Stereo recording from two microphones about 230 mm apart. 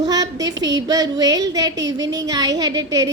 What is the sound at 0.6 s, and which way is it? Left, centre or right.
A woman's voice, centre.